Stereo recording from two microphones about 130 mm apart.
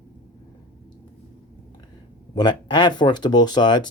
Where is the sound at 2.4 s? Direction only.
35° left (ahead or behind).